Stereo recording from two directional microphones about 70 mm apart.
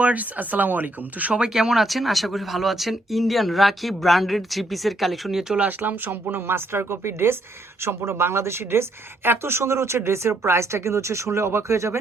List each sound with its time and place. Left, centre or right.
0.0 s speech: right
1.3 s speech: centre
5.5 s speech: right